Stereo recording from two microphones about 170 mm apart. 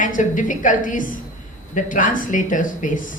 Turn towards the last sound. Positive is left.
turn(degrees=50)  # may be behind; listen again after turning